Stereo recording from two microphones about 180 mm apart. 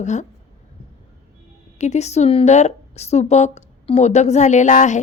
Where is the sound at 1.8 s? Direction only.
40° left (ahead or behind).